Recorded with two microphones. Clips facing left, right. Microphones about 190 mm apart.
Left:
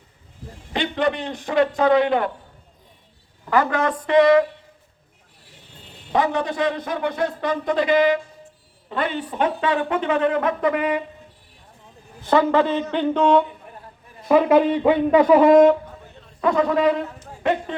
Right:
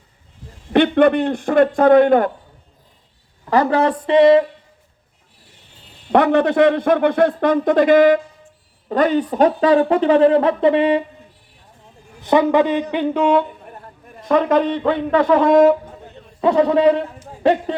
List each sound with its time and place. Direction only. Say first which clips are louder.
0.7 s a man's voice: right 9 dB; 60° right (ahead or behind)
3.5 s speech: right 4 dB; 35° right (ahead or behind)
6.1 s a man's voice: right 7 dB; 65° right (ahead or behind); by 11.0 s 30° right (ahead or behind)
12.2 s speech: right 3 dB; 15° right (ahead or behind)
14.3 s a man's voice: even; 5° left (ahead or behind)
16.4 s speech: right 5 dB; 30° right (ahead or behind)